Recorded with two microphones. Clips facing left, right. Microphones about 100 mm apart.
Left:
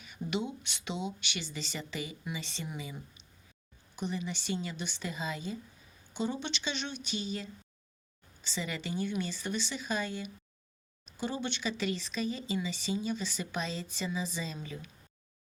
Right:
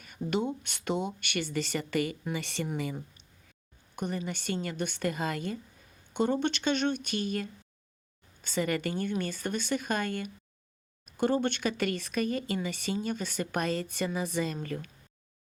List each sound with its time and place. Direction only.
0.0 s speech: 45° right (ahead or behind); by 2.6 s 65° right (ahead or behind)
3.9 s speech: 50° right (ahead or behind)